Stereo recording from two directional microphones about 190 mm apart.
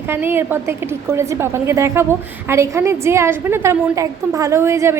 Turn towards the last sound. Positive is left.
turn(degrees=-15)  # may be behind; listen again after turning